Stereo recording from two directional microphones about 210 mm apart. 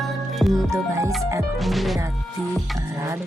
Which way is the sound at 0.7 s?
15° right (ahead or behind).